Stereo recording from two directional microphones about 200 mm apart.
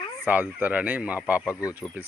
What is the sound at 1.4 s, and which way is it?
Speech, 15° left (ahead or behind).